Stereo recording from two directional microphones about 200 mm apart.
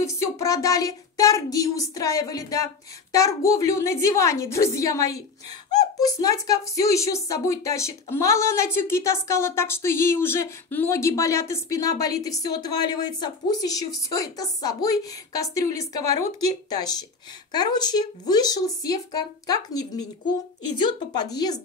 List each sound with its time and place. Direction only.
0.0 s a woman's voice: 15° left (ahead or behind)